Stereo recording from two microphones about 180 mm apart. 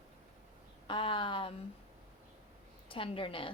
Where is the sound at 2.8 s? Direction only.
30° left (ahead or behind).